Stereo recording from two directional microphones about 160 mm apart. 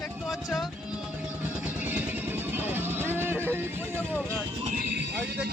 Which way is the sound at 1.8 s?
10° right (ahead or behind).